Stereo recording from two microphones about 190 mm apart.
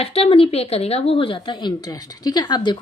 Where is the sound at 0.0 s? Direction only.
30° left (ahead or behind).